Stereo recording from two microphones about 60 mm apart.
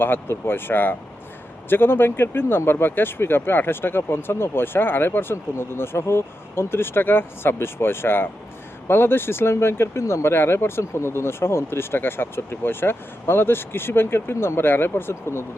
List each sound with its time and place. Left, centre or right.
0.0 s speech: left